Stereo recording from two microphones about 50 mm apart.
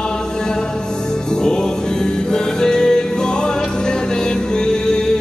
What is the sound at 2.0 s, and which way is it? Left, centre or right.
Music, centre.